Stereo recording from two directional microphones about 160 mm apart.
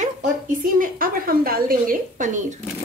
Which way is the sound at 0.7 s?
60° right (ahead or behind).